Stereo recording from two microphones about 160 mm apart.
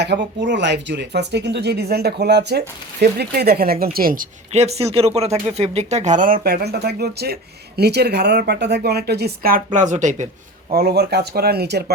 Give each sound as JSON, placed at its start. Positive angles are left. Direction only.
{"t": 0.0, "sound": "speech", "side_deg": -90}
{"t": 4.6, "sound": "speech", "side_deg": -40}
{"t": 9.7, "sound": "speech", "side_deg": -50}
{"t": 10.7, "sound": "speech", "side_deg": -75}